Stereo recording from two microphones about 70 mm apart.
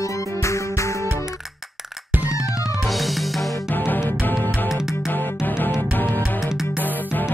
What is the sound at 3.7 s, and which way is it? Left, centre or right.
Music, left.